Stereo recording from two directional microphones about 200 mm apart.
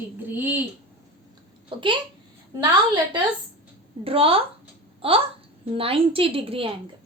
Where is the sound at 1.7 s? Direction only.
25° right (ahead or behind).